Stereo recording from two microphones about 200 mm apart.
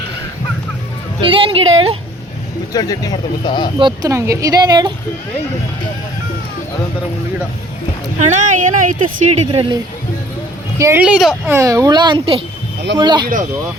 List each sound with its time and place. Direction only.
1.2 s speech: 25° right (ahead or behind)
2.7 s speech: 20° left (ahead or behind)
3.8 s speech: 20° right (ahead or behind)
8.2 s speech: 40° right (ahead or behind)
9.5 s speech: 25° right (ahead or behind)
10.8 s speech: 10° right (ahead or behind)
11.4 s speech: 15° right (ahead or behind)